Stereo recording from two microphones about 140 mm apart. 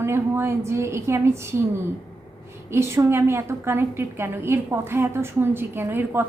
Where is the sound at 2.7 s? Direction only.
20° right (ahead or behind).